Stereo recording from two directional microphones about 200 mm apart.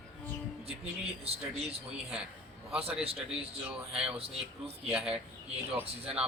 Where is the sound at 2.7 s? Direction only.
30° right (ahead or behind).